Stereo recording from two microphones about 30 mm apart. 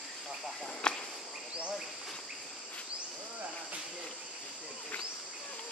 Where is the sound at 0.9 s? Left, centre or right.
Left.